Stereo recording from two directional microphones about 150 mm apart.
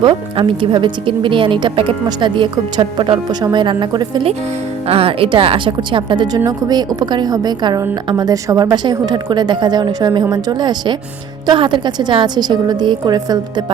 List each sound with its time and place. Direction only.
0.0 s a woman's voice: 35° right (ahead or behind)